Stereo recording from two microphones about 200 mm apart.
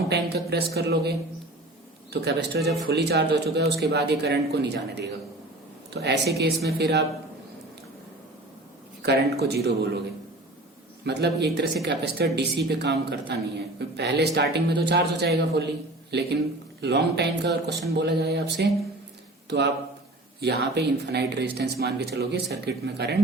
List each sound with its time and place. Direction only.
0.1 s speech: 55° right (ahead or behind)
9.0 s speech: 55° right (ahead or behind)
11.0 s speech: 55° right (ahead or behind)